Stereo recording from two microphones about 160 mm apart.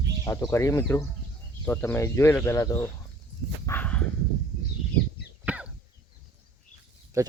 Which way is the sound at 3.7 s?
10° left (ahead or behind).